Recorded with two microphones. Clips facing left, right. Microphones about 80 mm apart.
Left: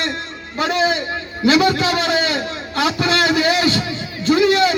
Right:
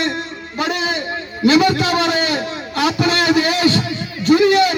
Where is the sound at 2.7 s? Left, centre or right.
Left.